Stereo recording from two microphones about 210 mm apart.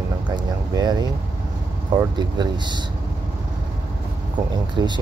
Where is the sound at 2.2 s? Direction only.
20° right (ahead or behind).